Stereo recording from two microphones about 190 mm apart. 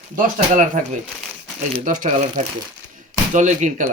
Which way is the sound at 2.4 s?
40° right (ahead or behind).